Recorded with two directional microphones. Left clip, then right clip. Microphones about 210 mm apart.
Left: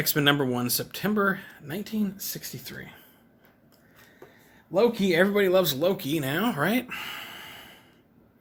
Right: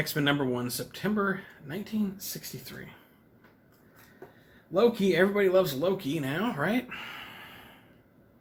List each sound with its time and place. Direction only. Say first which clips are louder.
0.0 s speech: left 4 dB; 55° left (ahead or behind)
4.7 s speech: left 2 dB; 45° left (ahead or behind)